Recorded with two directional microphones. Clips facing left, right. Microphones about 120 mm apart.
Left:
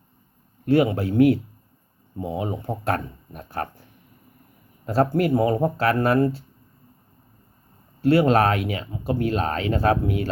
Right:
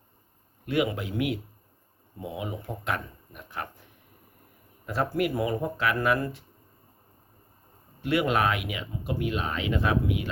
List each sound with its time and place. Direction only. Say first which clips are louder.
0.7 s speech: left 8 dB; 30° left (ahead or behind)
4.9 s speech: left 7 dB; 30° left (ahead or behind)
8.0 s speech: left 7 dB; 35° left (ahead or behind)